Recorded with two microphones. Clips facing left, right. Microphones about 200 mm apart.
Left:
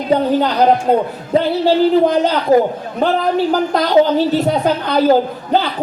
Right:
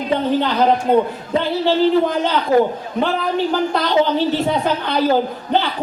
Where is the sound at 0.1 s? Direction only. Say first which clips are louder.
Left 4 dB; 40° left (ahead or behind).